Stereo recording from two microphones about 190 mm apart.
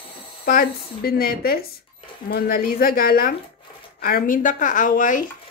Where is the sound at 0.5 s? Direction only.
50° left (ahead or behind).